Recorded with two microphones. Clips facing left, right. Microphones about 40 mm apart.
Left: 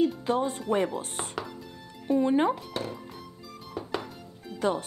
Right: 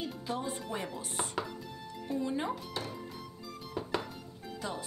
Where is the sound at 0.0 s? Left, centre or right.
Left.